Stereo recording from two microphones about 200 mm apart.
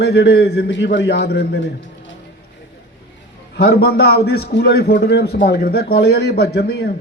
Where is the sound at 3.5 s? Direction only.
50° left (ahead or behind).